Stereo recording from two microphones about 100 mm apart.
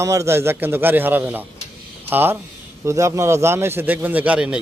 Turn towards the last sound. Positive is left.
turn(degrees=-10)  # may be behind; listen again after turning